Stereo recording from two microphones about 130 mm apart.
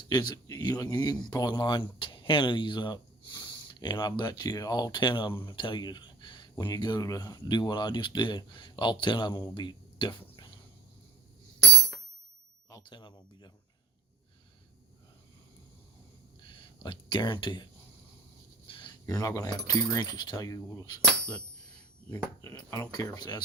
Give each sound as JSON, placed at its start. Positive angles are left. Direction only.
{"t": 0.1, "sound": "speech", "side_deg": 30}
{"t": 9.6, "sound": "a sound", "side_deg": 40}
{"t": 12.7, "sound": "speech", "side_deg": 35}
{"t": 16.5, "sound": "speech", "side_deg": 40}
{"t": 18.7, "sound": "a sound", "side_deg": 40}
{"t": 19.0, "sound": "speech", "side_deg": 25}
{"t": 22.4, "sound": "speech", "side_deg": 25}